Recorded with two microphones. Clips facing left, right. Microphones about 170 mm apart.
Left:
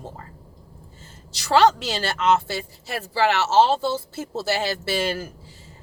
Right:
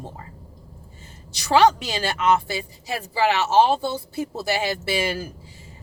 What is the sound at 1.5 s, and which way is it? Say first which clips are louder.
A woman's voice: even; 15° right (ahead or behind).